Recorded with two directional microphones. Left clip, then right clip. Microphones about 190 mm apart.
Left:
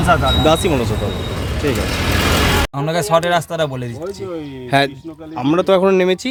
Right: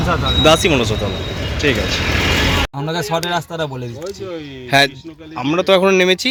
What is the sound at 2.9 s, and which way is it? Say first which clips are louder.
Speech: left 7 dB; 30° left (ahead or behind).